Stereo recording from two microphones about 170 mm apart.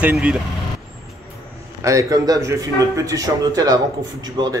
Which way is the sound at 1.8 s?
20° right (ahead or behind).